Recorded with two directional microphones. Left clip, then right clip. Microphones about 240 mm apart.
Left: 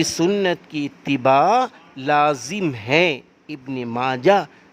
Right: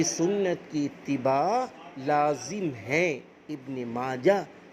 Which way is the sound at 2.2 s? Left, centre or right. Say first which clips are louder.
Left 8 dB; left.